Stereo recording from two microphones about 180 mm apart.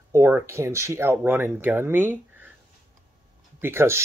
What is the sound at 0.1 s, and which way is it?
Speech, 15° right (ahead or behind).